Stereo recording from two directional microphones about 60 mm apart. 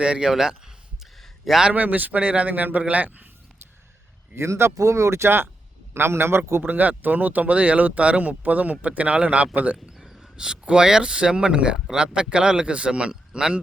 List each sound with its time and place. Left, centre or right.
0.0 s a man's voice: centre
1.2 s a sound: centre
1.7 s speech: right
4.4 s speech: right
6.7 s speech: right
10.0 s a sound: centre
10.3 s a man's voice: centre